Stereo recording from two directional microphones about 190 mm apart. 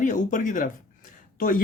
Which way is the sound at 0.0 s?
45° left (ahead or behind).